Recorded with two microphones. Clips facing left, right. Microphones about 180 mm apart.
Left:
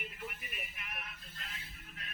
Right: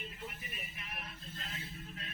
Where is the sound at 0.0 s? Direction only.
25° right (ahead or behind).